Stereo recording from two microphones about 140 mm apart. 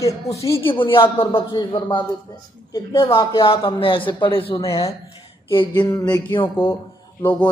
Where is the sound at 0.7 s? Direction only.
40° left (ahead or behind).